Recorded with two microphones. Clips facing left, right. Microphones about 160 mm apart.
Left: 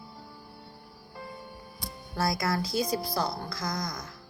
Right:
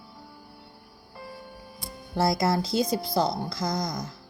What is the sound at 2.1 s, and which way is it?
A woman's voice, 25° right (ahead or behind).